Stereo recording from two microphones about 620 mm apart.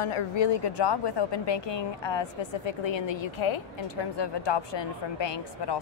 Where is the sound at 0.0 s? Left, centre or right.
Left.